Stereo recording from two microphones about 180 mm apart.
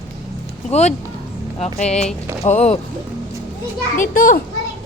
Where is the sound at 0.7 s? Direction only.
40° left (ahead or behind).